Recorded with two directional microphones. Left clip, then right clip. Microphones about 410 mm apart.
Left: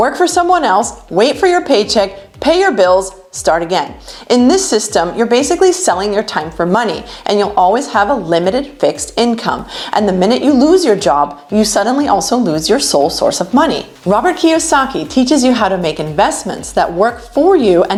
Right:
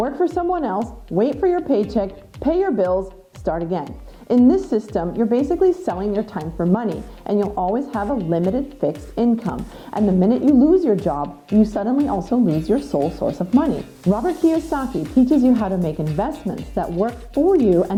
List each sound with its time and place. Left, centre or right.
0.0 s a woman's voice: centre
7.5 s a woman's voice: centre